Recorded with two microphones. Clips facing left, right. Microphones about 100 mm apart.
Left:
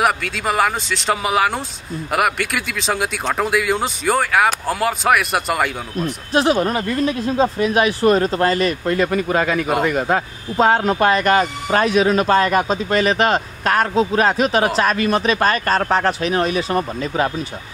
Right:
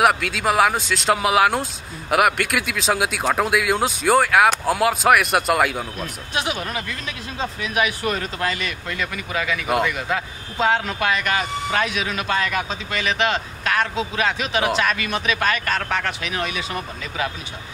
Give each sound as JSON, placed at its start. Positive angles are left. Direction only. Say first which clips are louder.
{"t": 0.0, "sound": "speech", "louder": "right 1 dB", "side_deg": 0}
{"t": 6.3, "sound": "speech", "louder": "left 9 dB", "side_deg": 40}